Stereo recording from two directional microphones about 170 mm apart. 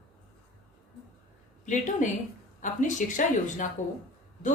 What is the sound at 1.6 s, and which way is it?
Speech, 50° left (ahead or behind).